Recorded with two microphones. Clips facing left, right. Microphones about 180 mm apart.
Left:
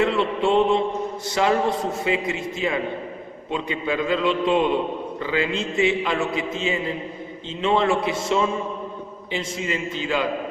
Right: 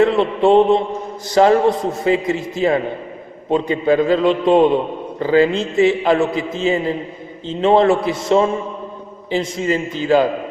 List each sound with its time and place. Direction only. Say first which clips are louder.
0.0 s mantra: right 7 dB; 40° right (ahead or behind)
1.3 s a man's voice: right 8 dB; 40° right (ahead or behind)